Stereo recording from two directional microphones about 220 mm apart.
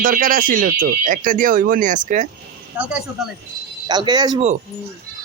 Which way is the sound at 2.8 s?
5° right (ahead or behind).